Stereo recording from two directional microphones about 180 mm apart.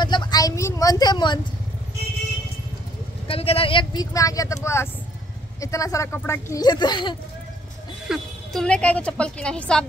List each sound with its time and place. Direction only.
0.0 s vehicle: 25° left (ahead or behind)
3.3 s speech: 30° left (ahead or behind)
8.1 s a woman's voice: 5° left (ahead or behind)